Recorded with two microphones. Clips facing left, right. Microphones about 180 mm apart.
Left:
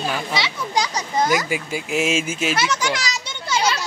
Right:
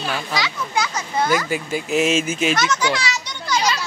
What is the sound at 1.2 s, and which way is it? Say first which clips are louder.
Speech: even; 10° left (ahead or behind).